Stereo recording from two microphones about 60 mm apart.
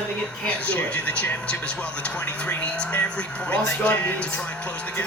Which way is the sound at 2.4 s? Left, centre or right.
Left.